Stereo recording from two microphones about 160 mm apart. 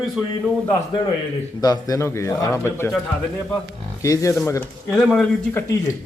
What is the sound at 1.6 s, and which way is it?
A man's voice, 25° left (ahead or behind).